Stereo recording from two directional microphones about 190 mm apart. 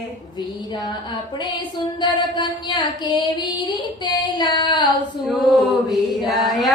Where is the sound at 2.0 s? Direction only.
25° left (ahead or behind).